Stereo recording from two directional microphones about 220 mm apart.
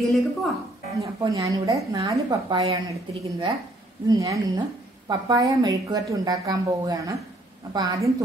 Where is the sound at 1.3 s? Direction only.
15° right (ahead or behind).